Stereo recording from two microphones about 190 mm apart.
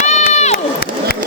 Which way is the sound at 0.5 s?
50° left (ahead or behind).